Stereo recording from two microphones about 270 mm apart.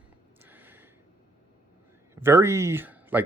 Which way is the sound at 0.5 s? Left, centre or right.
Centre.